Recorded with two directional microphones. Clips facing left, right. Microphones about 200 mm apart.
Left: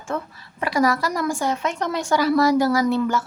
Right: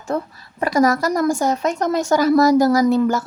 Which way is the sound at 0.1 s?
35° right (ahead or behind).